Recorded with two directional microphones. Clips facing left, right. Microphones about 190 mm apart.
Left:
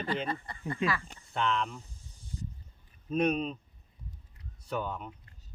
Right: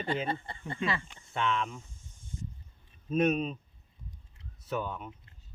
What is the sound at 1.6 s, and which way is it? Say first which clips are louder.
Snake: even; 35° left (ahead or behind).